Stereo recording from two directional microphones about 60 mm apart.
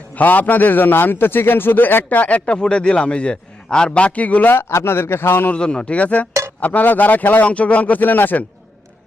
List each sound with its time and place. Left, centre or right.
0.1 s a man's voice: left
4.5 s a man's voice: left
5.5 s a man's voice: centre